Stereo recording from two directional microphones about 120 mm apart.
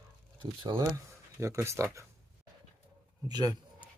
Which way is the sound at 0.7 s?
40° right (ahead or behind).